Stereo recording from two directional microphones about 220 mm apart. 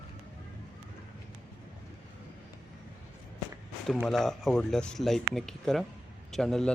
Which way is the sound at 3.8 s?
Centre (ahead or behind).